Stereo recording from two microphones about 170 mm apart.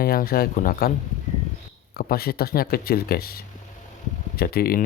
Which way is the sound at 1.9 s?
60° left (ahead or behind).